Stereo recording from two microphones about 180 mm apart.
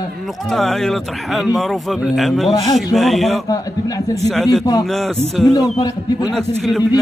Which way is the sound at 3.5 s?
20° left (ahead or behind).